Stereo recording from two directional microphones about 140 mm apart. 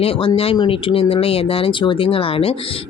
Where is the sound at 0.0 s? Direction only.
40° left (ahead or behind).